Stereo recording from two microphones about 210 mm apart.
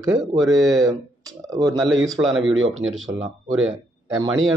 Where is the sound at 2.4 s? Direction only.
65° right (ahead or behind).